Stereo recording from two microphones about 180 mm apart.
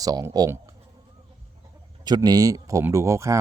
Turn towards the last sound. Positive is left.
turn(degrees=-15)  # may be behind; listen again after turning